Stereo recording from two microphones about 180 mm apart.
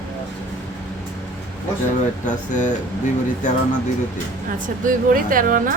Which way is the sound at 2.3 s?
45° left (ahead or behind).